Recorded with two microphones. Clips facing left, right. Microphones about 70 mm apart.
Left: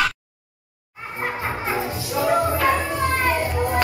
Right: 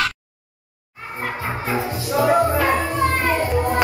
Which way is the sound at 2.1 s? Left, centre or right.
Centre.